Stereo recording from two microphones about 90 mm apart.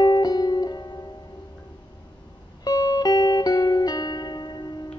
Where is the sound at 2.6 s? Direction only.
45° left (ahead or behind).